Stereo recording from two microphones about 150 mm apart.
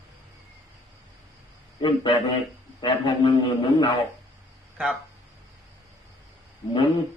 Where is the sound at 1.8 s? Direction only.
35° left (ahead or behind).